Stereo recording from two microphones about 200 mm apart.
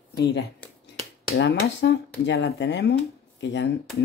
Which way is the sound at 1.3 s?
60° left (ahead or behind).